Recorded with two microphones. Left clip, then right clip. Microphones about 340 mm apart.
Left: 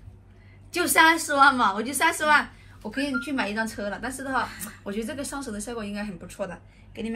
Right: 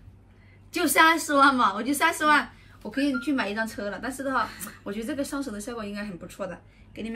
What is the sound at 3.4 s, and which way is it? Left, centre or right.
A woman's voice, centre.